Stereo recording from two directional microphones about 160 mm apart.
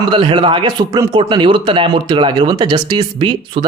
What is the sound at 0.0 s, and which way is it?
Speech, 30° right (ahead or behind).